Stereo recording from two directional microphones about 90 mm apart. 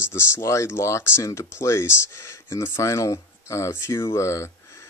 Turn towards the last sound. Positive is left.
turn(degrees=30)  # may be behind; listen again after turning